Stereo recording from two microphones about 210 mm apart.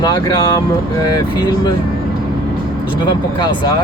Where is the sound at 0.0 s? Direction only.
20° left (ahead or behind).